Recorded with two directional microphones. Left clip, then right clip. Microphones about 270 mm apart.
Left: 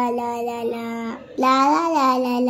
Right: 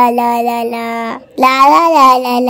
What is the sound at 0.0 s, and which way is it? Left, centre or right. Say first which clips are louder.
Child singing: right 12 dB; right.